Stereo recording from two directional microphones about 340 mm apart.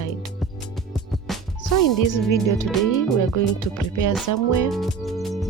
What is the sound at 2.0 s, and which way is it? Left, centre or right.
Speech, left.